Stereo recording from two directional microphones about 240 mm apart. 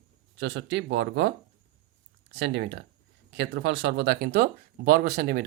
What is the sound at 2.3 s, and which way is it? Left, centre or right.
Speech, right.